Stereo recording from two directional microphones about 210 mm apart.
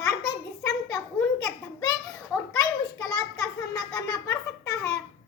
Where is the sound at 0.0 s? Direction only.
15° left (ahead or behind).